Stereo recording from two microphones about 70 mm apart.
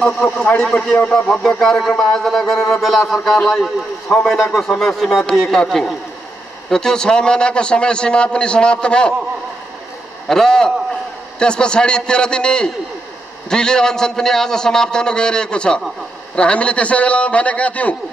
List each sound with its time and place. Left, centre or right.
0.0 s a man's voice: centre
10.2 s a man's voice: centre